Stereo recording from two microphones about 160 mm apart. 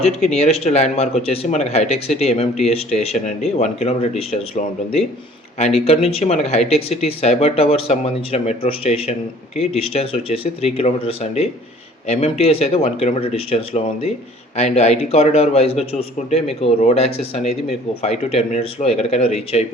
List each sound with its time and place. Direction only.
0.0 s speech: 40° left (ahead or behind)